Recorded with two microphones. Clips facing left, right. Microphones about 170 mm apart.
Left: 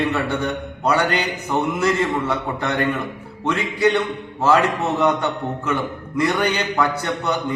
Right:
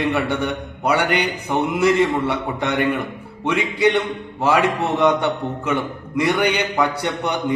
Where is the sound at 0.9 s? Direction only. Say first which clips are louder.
Right 2 dB; 15° right (ahead or behind).